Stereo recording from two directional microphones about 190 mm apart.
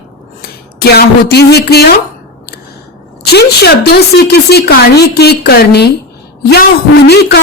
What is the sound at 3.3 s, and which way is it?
A woman's voice, 60° left (ahead or behind).